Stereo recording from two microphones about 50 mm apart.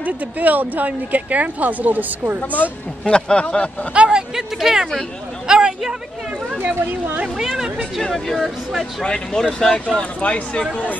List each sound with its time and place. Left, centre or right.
0.0 s speech: right
3.1 s speech: centre
3.9 s speech: right
4.4 s speech: centre
6.6 s speech: right
7.3 s speech: centre
8.0 s speech: centre
9.0 s speech: centre